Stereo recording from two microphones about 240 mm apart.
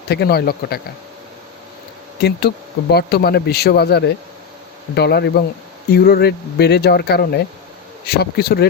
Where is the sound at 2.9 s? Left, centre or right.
Left.